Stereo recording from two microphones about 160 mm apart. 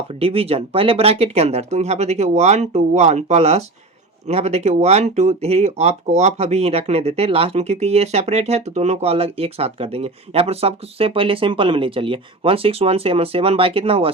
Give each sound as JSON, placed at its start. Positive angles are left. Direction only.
{"t": 0.2, "sound": "speech", "side_deg": -35}